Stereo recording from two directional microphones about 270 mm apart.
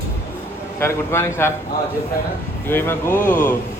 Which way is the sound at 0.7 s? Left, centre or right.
Centre.